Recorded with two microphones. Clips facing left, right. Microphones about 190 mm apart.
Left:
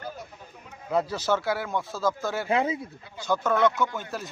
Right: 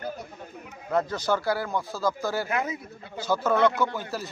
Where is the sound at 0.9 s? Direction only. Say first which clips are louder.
Even; 10° left (ahead or behind).